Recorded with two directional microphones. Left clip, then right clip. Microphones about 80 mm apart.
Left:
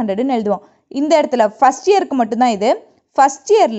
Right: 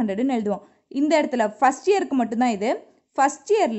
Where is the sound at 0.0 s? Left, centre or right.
Left.